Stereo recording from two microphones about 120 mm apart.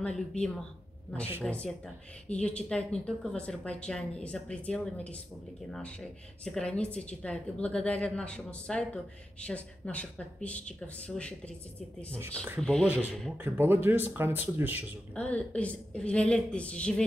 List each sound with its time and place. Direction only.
0.0 s a woman's voice: 5° left (ahead or behind)
12.5 s speech: 5° left (ahead or behind)
12.8 s speech: 15° right (ahead or behind)
15.1 s a woman's voice: 10° left (ahead or behind)